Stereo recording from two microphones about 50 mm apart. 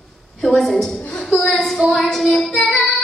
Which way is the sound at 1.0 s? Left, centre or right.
Left.